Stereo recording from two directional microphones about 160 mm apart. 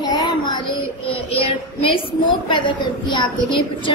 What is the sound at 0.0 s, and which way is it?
Child singing, 25° left (ahead or behind).